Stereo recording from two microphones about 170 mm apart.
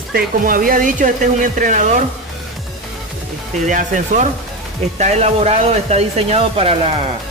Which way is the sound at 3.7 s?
50° right (ahead or behind).